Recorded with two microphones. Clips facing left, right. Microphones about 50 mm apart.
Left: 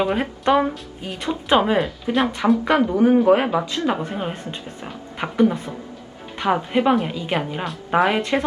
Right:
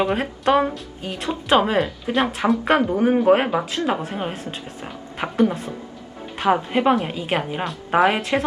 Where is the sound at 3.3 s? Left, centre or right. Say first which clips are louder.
Right 4 dB; right.